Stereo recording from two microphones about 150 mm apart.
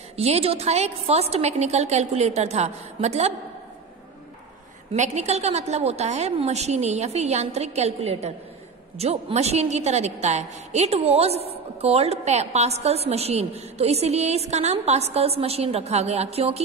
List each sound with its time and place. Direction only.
0.1 s a woman's voice: 45° right (ahead or behind)
4.9 s a woman's voice: 50° right (ahead or behind)